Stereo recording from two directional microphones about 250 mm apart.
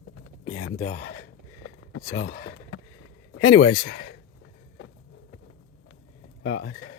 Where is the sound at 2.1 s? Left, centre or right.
Left.